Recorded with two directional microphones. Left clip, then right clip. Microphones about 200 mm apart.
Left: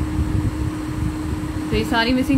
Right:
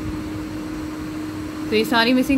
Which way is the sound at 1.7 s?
35° right (ahead or behind).